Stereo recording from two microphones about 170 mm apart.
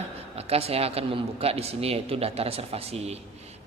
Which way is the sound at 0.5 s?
35° right (ahead or behind).